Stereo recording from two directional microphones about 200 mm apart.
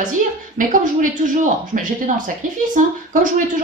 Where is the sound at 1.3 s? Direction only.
40° right (ahead or behind).